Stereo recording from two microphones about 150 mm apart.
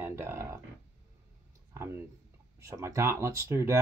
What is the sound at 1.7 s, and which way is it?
Speech, 20° right (ahead or behind).